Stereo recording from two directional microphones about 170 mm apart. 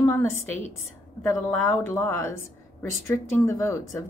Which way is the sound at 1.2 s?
15° left (ahead or behind).